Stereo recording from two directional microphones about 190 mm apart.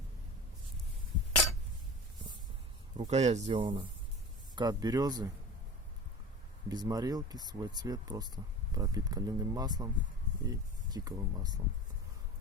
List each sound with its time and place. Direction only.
3.1 s speech: 35° right (ahead or behind); by 5.3 s 20° right (ahead or behind)
6.7 s speech: 20° right (ahead or behind)